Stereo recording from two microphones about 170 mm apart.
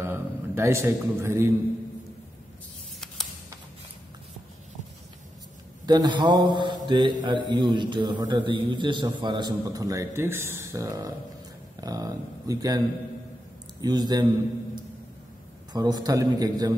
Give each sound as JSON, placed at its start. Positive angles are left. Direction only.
{"t": 0.0, "sound": "a man's voice", "side_deg": -15}
{"t": 5.9, "sound": "a man's voice", "side_deg": -25}
{"t": 15.7, "sound": "a man's voice", "side_deg": -25}